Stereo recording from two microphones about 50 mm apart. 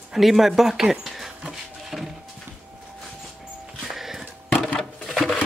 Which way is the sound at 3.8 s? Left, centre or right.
Centre.